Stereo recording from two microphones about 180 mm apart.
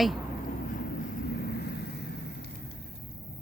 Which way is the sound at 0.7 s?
50° left (ahead or behind).